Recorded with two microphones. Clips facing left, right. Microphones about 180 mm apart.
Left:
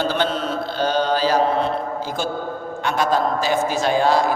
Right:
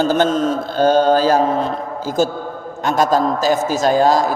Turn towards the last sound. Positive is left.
turn(degrees=-40)  # may be behind; listen again after turning